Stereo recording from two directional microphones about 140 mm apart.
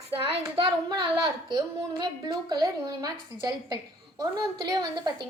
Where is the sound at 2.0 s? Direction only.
30° right (ahead or behind).